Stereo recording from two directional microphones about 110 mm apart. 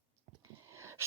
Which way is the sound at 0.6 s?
25° right (ahead or behind).